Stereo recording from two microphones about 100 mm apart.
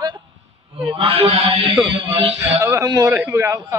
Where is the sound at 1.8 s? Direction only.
65° right (ahead or behind).